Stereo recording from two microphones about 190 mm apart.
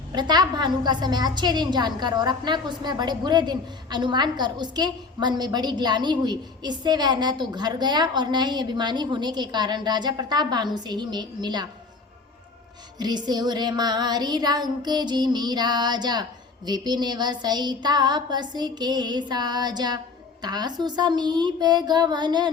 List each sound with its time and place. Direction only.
0.1 s a woman's voice: 20° right (ahead or behind)
13.0 s a woman's voice: 20° right (ahead or behind)